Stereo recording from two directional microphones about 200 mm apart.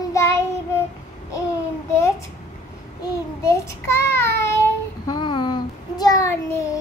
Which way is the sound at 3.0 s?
15° left (ahead or behind).